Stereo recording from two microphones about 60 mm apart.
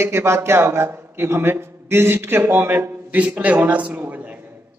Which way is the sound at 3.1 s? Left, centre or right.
Right.